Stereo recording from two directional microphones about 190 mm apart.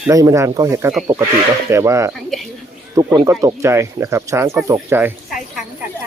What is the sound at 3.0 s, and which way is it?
Speech, 15° right (ahead or behind).